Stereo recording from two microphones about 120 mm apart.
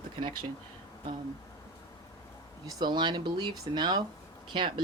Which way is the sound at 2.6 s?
35° right (ahead or behind).